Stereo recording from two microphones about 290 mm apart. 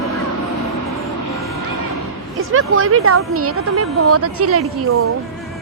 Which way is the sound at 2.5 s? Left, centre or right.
Right.